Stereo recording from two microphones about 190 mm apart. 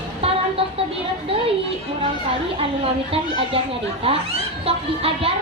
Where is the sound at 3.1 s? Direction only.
30° right (ahead or behind).